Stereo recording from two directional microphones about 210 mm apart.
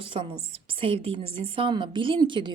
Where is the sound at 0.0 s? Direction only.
25° right (ahead or behind).